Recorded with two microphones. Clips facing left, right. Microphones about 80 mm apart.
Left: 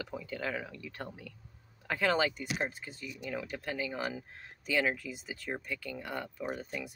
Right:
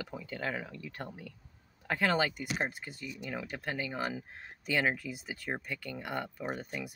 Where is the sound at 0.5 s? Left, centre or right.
Right.